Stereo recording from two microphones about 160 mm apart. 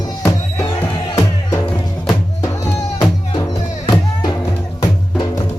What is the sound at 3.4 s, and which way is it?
Music, 25° left (ahead or behind).